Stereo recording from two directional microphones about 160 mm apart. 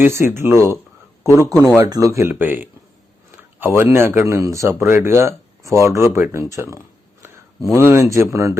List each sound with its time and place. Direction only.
0.0 s speech: 15° right (ahead or behind)
3.3 s a sound: 15° right (ahead or behind)
3.9 s speech: 15° right (ahead or behind)